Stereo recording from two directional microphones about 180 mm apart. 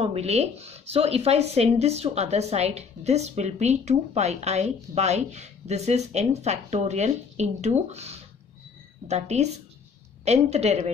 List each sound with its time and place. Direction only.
0.0 s speech: 35° right (ahead or behind)